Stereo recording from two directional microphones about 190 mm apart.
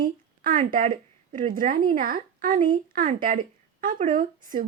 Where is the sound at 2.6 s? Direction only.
25° right (ahead or behind).